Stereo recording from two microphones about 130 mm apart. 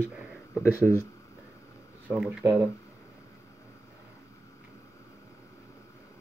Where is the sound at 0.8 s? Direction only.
20° left (ahead or behind).